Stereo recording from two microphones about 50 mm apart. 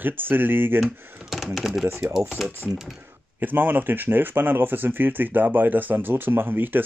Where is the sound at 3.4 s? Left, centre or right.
Right.